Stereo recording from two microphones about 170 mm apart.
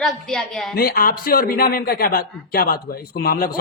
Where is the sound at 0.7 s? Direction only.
65° left (ahead or behind).